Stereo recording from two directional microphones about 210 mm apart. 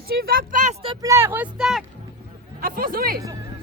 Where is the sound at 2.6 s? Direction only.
45° right (ahead or behind).